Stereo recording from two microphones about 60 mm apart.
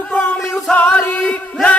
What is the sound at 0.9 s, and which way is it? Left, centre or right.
Chant, centre.